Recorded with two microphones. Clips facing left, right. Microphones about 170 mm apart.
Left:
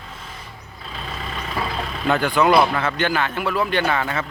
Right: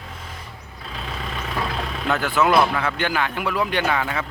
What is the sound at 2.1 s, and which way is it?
Speech, 5° right (ahead or behind).